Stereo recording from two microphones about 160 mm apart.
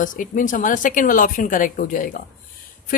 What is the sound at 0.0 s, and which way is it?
Speech, 55° left (ahead or behind).